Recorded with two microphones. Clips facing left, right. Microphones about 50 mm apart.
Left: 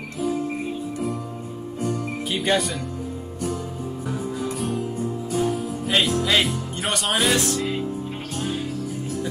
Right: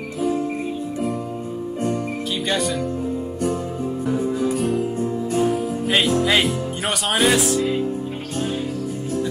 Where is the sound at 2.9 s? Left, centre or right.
Right.